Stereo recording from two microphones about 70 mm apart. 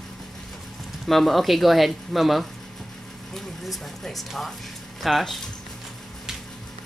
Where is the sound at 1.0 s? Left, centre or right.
Centre.